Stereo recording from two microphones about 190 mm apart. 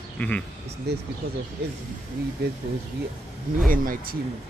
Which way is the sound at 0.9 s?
60° right (ahead or behind).